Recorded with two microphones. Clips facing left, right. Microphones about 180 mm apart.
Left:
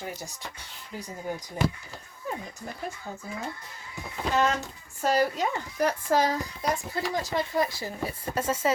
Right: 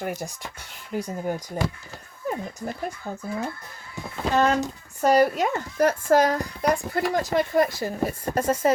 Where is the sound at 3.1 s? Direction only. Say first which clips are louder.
Right 5 dB; 60° right (ahead or behind).